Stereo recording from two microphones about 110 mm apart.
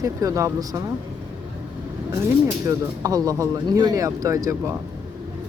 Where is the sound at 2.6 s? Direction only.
30° right (ahead or behind).